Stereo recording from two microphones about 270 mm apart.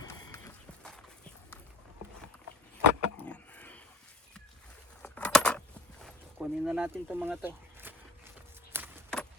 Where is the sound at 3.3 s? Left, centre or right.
Centre.